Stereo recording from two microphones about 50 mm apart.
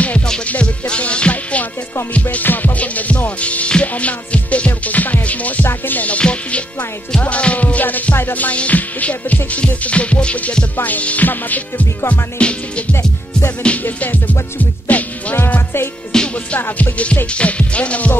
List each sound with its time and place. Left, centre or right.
0.5 s music: left
12.1 s music: left
13.9 s music: left
14.6 s rapping: left
16.1 s music: centre
16.9 s music: left